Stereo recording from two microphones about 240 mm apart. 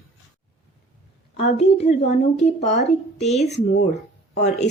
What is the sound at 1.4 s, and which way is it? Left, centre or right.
A woman's voice, left.